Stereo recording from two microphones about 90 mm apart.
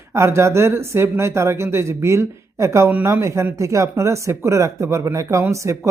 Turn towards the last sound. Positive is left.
turn(degrees=-35)  # may be behind; listen again after turning